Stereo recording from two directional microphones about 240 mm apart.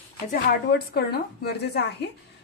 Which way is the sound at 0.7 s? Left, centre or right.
Left.